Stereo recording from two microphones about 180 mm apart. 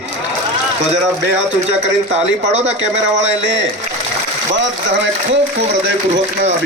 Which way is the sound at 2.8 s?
90° right.